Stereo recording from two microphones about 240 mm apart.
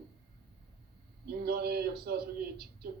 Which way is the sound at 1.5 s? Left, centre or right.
Right.